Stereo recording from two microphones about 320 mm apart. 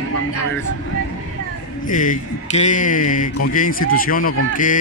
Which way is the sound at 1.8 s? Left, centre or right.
Left.